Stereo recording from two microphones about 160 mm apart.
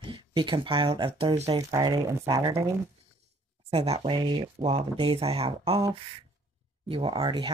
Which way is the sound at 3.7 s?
40° right (ahead or behind).